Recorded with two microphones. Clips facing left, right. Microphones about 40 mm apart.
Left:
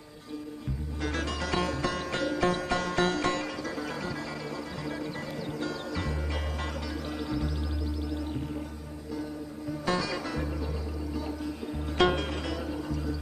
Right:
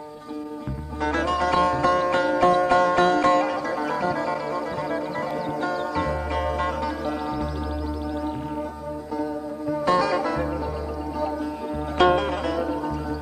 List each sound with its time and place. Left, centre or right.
1.0 s music: centre
3.7 s music: right
5.6 s music: centre
9.8 s music: centre
12.0 s music: centre